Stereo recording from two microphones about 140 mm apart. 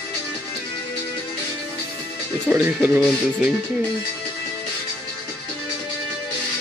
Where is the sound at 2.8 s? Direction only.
5° right (ahead or behind).